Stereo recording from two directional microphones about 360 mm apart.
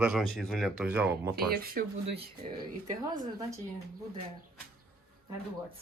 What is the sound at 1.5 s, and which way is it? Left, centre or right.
Speech, right.